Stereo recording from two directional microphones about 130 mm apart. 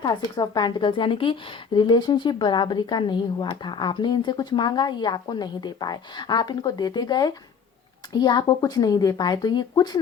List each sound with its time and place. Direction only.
0.3 s a woman's voice: 35° left (ahead or behind)